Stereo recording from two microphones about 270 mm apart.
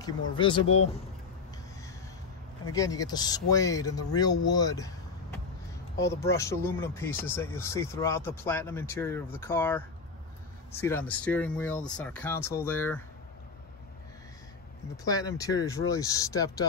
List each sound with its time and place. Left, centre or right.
0.4 s speech: centre
2.6 s speech: centre
15.0 s speech: centre